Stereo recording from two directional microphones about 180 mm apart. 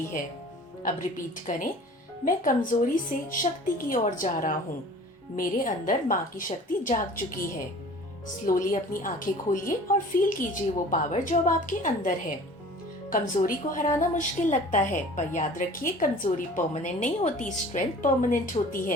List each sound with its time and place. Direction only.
0.8 s a woman's voice: 45° left (ahead or behind)